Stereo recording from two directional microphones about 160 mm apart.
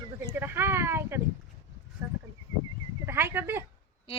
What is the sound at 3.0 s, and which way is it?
Speech, 15° right (ahead or behind).